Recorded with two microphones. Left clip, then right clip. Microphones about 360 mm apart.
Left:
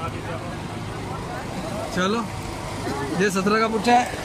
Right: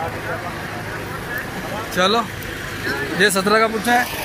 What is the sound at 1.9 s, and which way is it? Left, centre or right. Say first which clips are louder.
Speech: right 7 dB; centre.